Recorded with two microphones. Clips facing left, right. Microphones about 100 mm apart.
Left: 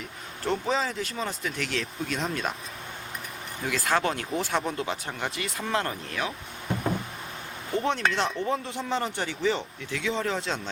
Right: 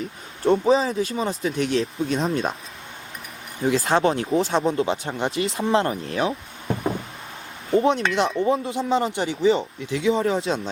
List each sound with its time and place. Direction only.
0.4 s speech: 20° right (ahead or behind)
3.6 s speech: 25° right (ahead or behind)
7.7 s speech: 20° right (ahead or behind)